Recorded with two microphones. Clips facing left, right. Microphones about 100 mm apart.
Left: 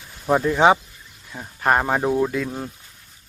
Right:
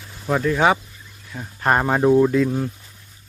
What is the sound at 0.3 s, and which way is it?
Speech, 20° left (ahead or behind).